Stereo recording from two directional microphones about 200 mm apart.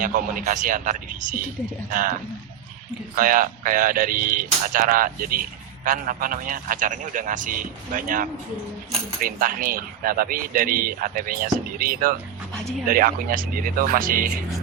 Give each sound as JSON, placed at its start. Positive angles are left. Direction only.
{"t": 0.0, "sound": "speech", "side_deg": -45}
{"t": 3.2, "sound": "speech", "side_deg": -45}